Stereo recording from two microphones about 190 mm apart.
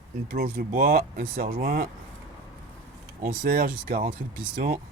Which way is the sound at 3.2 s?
50° right (ahead or behind).